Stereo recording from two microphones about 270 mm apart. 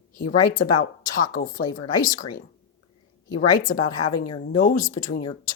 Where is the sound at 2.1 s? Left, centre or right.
Left.